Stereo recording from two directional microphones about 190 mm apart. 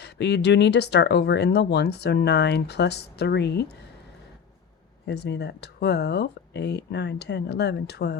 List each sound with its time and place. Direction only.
0.0 s speech: 65° left (ahead or behind)
5.0 s speech: 60° left (ahead or behind)